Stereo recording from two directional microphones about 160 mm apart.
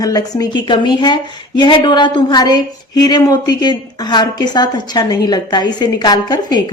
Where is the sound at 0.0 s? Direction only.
25° left (ahead or behind).